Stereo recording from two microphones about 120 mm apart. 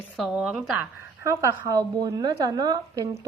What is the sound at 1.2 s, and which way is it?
A woman's voice, 30° right (ahead or behind).